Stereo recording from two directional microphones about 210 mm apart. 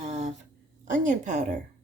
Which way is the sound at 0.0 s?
35° right (ahead or behind).